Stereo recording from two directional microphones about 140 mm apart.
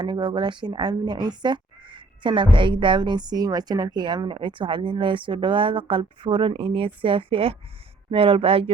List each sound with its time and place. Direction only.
0.0 s speech: 35° right (ahead or behind)